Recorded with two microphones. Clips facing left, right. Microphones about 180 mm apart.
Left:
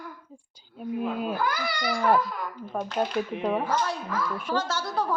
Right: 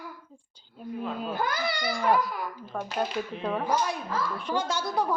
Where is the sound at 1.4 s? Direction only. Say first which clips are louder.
Left 1 dB; 25° right (ahead or behind).